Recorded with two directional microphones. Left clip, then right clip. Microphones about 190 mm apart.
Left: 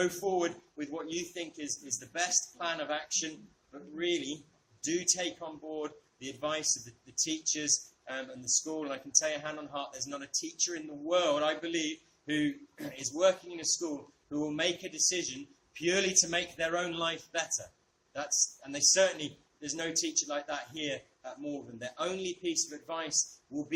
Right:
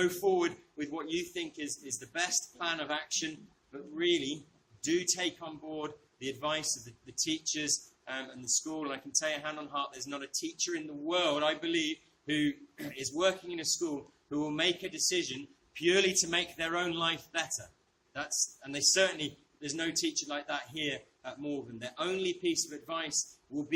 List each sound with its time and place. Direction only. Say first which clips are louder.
0.3 s a man's voice: right 2 dB; 20° left (ahead or behind)
18.6 s a man's voice: left 1 dB; 20° left (ahead or behind)